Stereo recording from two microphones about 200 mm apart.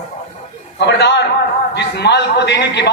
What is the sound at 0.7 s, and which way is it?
A man's voice, 60° left (ahead or behind).